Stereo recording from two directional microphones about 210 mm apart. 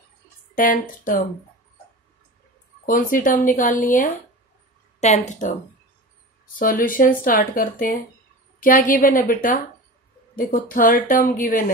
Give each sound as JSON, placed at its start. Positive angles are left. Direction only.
{"t": 0.6, "sound": "speech", "side_deg": 40}
{"t": 2.9, "sound": "speech", "side_deg": 40}
{"t": 6.6, "sound": "a woman's voice", "side_deg": 40}